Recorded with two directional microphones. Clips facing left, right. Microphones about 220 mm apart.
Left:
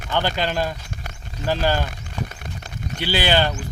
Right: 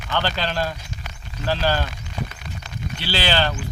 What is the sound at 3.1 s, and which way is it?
Speech, 15° left (ahead or behind).